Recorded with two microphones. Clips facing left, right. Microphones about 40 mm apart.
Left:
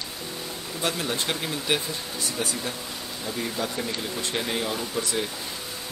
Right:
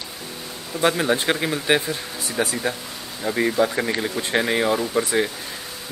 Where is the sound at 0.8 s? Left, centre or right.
Right.